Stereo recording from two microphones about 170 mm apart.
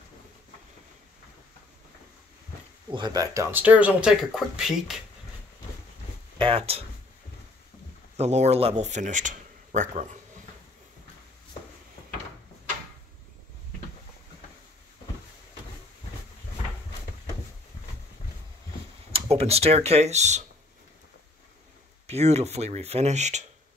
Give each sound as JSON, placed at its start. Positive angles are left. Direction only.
{"t": 2.9, "sound": "speech", "side_deg": -25}
{"t": 3.6, "sound": "speech", "side_deg": -10}
{"t": 6.3, "sound": "speech", "side_deg": -30}
{"t": 8.2, "sound": "speech", "side_deg": -40}
{"t": 19.1, "sound": "speech", "side_deg": -35}
{"t": 22.0, "sound": "speech", "side_deg": -40}